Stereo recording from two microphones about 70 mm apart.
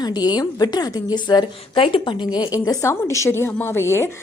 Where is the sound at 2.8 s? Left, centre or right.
Left.